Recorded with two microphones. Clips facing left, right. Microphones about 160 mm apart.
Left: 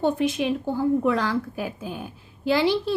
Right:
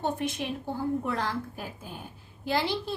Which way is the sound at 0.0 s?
90° left.